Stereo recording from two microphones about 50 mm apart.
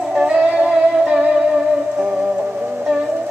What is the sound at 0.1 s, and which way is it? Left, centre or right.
Music, centre.